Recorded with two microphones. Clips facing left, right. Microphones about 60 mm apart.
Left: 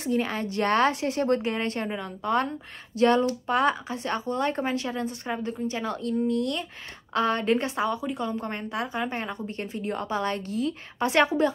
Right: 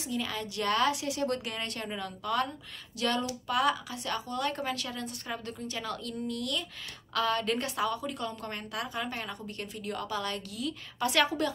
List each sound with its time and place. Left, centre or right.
0.0 s a woman's voice: left